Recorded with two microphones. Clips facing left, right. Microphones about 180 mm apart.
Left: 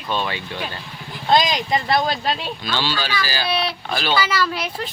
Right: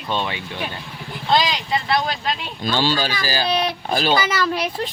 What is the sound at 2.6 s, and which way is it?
Speech, 45° right (ahead or behind).